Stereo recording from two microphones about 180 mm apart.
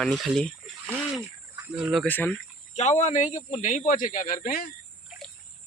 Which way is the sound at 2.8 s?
40° left (ahead or behind).